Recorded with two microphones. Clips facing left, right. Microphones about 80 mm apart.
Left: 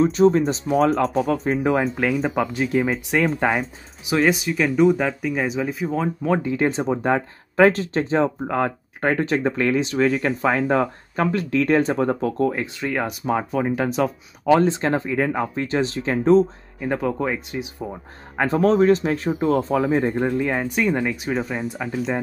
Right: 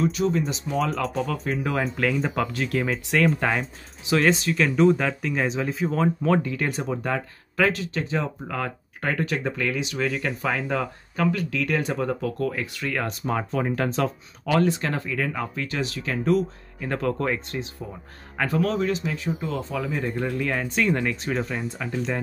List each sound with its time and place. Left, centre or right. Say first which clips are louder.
0.0 s speech: left 7 dB; left
1.6 s speech: left 5 dB; left
14.5 s speech: left 5 dB; left
16.8 s speech: left 3 dB; centre
18.4 s speech: left 7 dB; left; by 22.2 s centre